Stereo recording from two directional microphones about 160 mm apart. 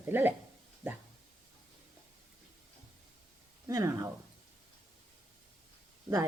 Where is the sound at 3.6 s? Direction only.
20° right (ahead or behind).